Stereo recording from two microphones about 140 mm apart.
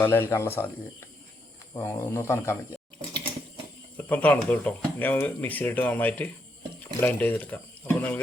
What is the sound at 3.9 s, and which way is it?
Speech, 10° left (ahead or behind).